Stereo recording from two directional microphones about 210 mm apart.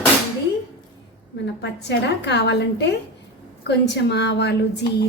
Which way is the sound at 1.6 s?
55° left (ahead or behind).